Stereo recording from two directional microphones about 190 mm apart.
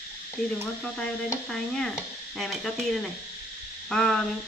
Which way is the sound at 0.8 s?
5° left (ahead or behind).